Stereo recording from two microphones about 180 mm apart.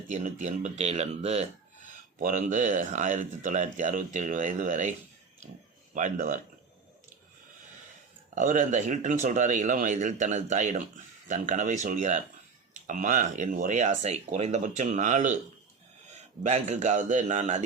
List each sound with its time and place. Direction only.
0.1 s speech: 45° right (ahead or behind)
5.9 s speech: 45° right (ahead or behind)
8.4 s speech: 45° right (ahead or behind)
16.4 s speech: 40° right (ahead or behind)